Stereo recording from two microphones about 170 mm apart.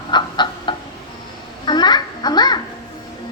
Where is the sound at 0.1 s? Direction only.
25° left (ahead or behind).